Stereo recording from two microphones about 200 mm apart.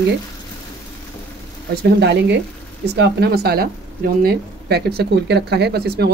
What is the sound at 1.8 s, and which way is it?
Speech, 60° right (ahead or behind).